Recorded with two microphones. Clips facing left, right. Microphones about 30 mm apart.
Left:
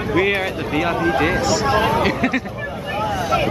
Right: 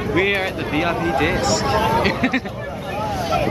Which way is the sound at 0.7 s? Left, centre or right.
Centre.